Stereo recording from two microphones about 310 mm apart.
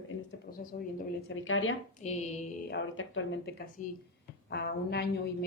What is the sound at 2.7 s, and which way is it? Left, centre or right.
Speech, left.